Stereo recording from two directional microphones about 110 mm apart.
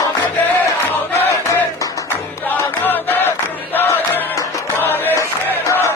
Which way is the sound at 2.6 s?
20° left (ahead or behind).